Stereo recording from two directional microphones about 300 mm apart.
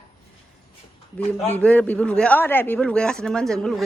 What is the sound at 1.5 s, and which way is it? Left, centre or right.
Speech, centre.